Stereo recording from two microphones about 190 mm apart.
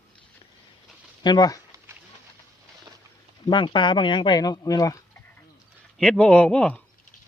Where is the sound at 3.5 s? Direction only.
25° left (ahead or behind).